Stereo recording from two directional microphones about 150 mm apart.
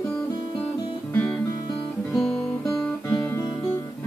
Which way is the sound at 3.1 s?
20° left (ahead or behind).